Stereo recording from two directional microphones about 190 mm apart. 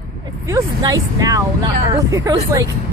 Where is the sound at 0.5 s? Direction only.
15° right (ahead or behind).